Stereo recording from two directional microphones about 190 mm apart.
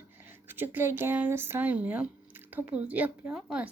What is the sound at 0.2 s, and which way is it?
Speech, 10° right (ahead or behind).